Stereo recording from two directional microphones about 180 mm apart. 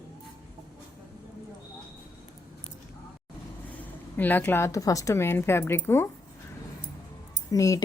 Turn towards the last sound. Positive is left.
turn(degrees=20)  # may be behind; listen again after turning